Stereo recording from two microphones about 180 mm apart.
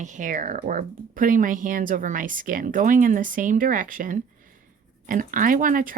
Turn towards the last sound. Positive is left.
turn(degrees=-50)  # may be behind; listen again after turning